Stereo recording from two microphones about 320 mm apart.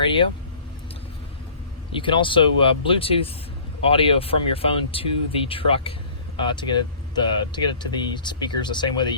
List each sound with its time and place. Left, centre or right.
0.0 s speech: centre
2.0 s speech: centre